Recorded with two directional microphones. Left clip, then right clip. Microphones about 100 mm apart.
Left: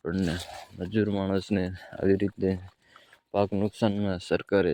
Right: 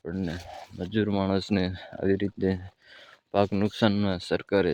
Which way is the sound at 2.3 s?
Centre (ahead or behind).